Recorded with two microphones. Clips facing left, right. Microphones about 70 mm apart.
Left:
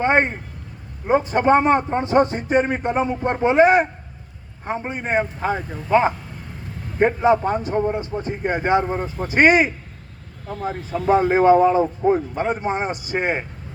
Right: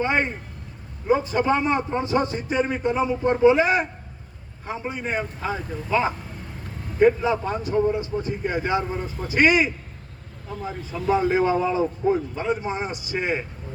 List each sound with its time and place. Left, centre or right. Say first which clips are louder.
0.0 s a man's voice: left 5 dB; left